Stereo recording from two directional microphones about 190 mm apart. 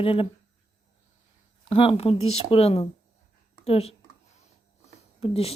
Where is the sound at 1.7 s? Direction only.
30° left (ahead or behind).